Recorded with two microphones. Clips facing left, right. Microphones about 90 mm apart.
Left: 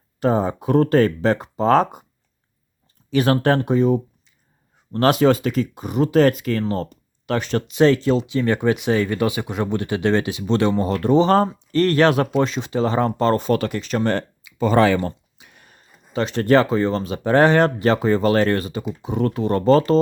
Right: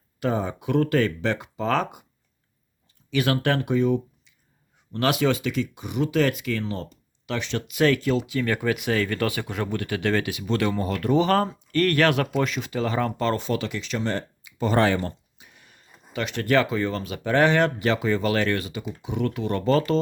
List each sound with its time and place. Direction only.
0.2 s speech: 35° left (ahead or behind)
3.1 s speech: 35° left (ahead or behind)
7.7 s speech: 30° left (ahead or behind); by 14.3 s 60° left (ahead or behind)
15.4 s a sound: 70° left (ahead or behind)
15.6 s speech: 40° left (ahead or behind)